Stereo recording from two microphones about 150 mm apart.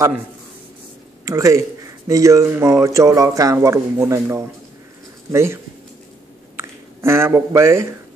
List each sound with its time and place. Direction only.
1.2 s speech: 20° right (ahead or behind)